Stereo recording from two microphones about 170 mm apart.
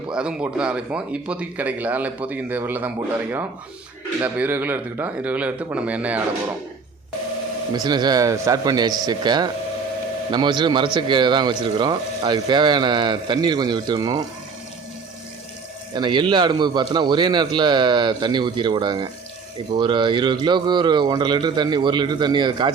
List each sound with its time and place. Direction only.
0.1 s speech: 5° right (ahead or behind)
4.2 s speech: 10° right (ahead or behind)
7.7 s speech: 25° right (ahead or behind)
16.0 s speech: 25° right (ahead or behind)